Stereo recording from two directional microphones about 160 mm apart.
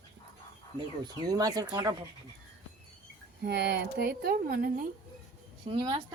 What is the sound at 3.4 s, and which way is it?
Speech, 90° right.